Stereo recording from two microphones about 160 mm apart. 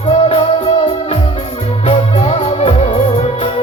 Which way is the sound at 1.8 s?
40° left (ahead or behind).